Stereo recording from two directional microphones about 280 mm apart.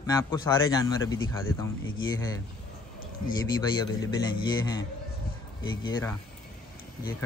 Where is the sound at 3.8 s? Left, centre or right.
Centre.